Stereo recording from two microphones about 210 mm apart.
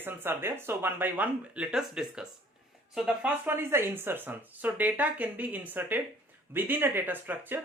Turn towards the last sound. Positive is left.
turn(degrees=-10)  # may be behind; listen again after turning